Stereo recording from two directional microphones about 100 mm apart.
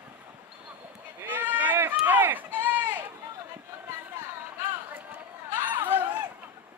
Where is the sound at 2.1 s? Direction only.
20° right (ahead or behind).